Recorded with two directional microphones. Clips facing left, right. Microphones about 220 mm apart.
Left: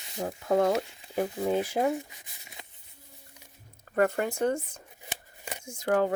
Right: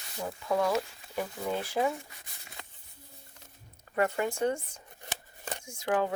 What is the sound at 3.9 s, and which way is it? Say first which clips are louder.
Speech: left 3 dB; 50° left (ahead or behind).